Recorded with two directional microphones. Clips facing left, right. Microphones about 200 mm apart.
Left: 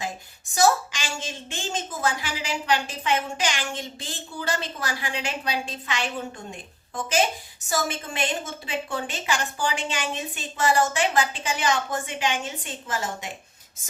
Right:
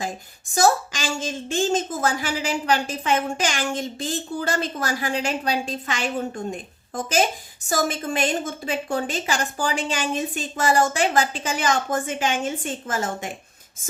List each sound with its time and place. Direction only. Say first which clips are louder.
0.5 s a woman's voice: right 2 dB; 45° right (ahead or behind)
7.7 s a woman's voice: right 4 dB; 40° right (ahead or behind)